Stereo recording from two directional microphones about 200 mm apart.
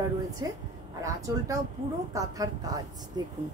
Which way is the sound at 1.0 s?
15° right (ahead or behind).